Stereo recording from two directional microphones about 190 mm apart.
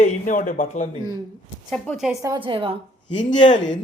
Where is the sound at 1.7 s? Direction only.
Centre (ahead or behind).